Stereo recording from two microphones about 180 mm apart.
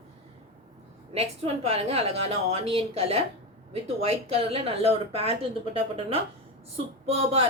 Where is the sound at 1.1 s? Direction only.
35° right (ahead or behind).